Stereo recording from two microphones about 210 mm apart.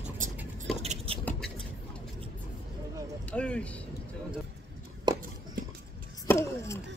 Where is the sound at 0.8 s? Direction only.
25° right (ahead or behind).